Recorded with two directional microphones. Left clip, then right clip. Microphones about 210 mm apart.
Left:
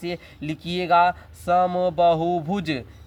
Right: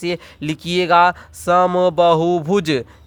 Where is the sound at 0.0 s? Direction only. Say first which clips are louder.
Right 7 dB; 45° right (ahead or behind).